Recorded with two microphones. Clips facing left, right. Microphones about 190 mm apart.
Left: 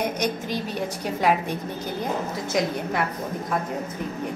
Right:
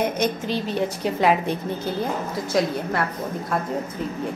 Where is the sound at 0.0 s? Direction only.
15° left (ahead or behind).